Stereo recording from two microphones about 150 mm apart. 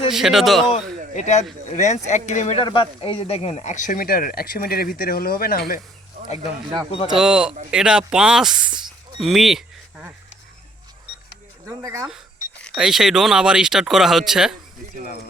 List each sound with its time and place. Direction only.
0.1 s speech: centre (ahead or behind)
0.7 s speech: 50° left (ahead or behind)
2.6 s speech: 35° left (ahead or behind); by 5.8 s 80° left
6.2 s speech: 45° left (ahead or behind)
7.1 s speech: 5° right (ahead or behind)
11.7 s speech: 20° right (ahead or behind)
12.7 s speech: 5° right (ahead or behind)